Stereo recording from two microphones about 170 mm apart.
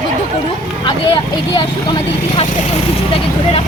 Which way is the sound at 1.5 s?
25° left (ahead or behind).